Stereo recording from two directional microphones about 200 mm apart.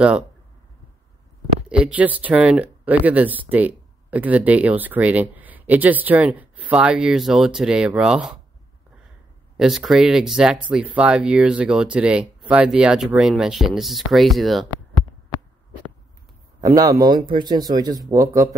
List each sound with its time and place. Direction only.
1.7 s speech: 5° right (ahead or behind)
9.6 s speech: centre (ahead or behind)
16.6 s a man's voice: 15° right (ahead or behind)